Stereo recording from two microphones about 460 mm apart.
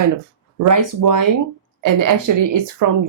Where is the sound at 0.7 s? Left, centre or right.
Right.